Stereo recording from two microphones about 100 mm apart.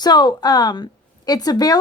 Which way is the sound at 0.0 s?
45° left (ahead or behind).